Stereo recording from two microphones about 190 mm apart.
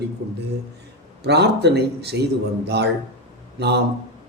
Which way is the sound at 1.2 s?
60° right (ahead or behind).